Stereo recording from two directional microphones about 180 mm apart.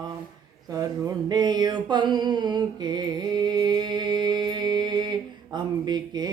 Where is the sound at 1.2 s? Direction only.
25° right (ahead or behind).